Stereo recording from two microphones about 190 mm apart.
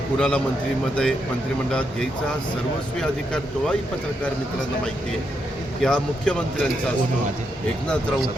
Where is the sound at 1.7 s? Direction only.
5° left (ahead or behind).